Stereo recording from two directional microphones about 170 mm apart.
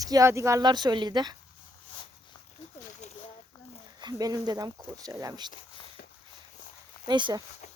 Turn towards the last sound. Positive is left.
turn(degrees=-25)  # may be behind; listen again after turning